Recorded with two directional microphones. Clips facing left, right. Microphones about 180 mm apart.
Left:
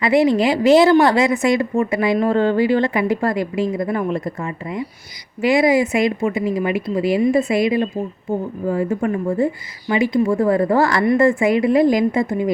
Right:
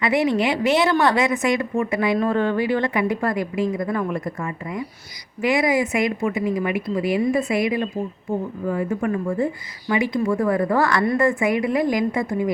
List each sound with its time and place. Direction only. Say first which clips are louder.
0.0 s speech: left 5 dB; 30° left (ahead or behind)
5.4 s speech: left 4 dB; 30° left (ahead or behind)